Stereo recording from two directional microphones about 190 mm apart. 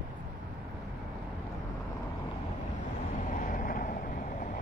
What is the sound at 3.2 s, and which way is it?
Boat, 45° left (ahead or behind).